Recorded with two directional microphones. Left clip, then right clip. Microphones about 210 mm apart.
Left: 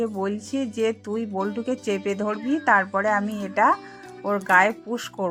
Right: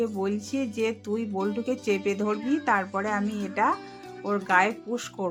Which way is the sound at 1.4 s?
Centre (ahead or behind).